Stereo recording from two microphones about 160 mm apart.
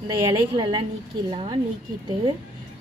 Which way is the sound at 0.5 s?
30° right (ahead or behind).